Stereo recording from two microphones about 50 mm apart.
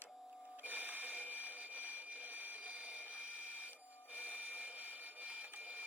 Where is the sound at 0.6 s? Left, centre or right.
Right.